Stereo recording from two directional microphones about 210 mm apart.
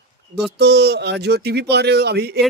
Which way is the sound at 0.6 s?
55° right (ahead or behind).